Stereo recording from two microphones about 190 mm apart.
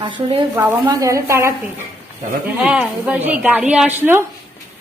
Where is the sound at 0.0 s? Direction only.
25° right (ahead or behind).